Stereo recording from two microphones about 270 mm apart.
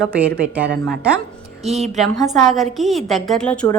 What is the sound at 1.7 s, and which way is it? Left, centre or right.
Speech, right.